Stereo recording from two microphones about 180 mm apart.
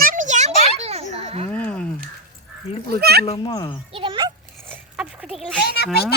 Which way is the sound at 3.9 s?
30° right (ahead or behind).